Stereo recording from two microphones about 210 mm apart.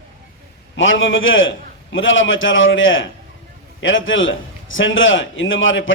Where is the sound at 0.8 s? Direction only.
65° left (ahead or behind).